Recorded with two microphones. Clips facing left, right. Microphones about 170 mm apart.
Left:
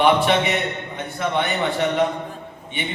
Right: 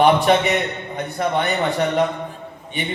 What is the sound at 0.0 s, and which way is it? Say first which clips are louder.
A man's voice: right 2 dB; 40° right (ahead or behind).